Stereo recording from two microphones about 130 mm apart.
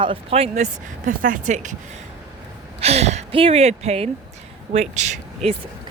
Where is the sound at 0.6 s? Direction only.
85° right.